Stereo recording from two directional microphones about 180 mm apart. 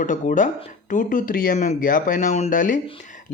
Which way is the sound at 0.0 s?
45° left (ahead or behind).